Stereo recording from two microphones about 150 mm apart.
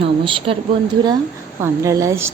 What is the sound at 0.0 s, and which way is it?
Speech, 35° right (ahead or behind).